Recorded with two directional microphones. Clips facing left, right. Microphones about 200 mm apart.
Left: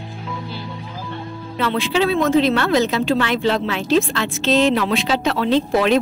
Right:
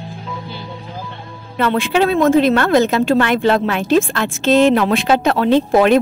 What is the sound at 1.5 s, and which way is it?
A woman's voice, 50° right (ahead or behind).